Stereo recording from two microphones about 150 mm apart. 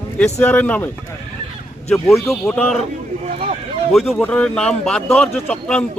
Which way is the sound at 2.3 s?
Centre (ahead or behind).